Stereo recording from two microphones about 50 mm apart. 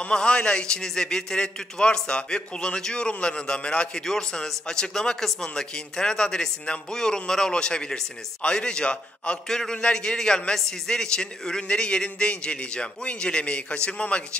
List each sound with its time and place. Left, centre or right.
0.0 s a man's voice: centre
9.5 s a man's voice: centre